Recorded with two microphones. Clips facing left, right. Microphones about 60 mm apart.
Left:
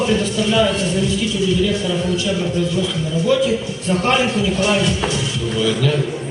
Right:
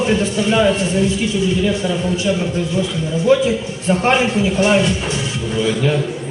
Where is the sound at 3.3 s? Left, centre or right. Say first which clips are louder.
Right 3 dB; right.